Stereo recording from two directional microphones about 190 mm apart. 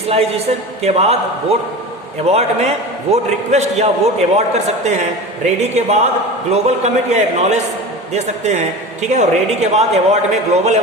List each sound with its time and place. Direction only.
0.1 s speech: 35° right (ahead or behind)